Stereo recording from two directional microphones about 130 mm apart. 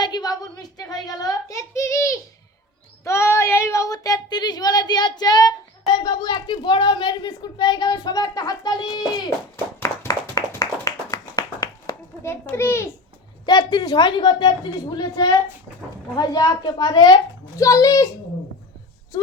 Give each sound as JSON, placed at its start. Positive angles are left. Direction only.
{"t": 0.0, "sound": "a sound", "side_deg": 30}
{"t": 0.8, "sound": "a child's voice", "side_deg": 30}
{"t": 9.8, "sound": "clapping", "side_deg": 25}
{"t": 13.4, "sound": "a child's voice", "side_deg": 30}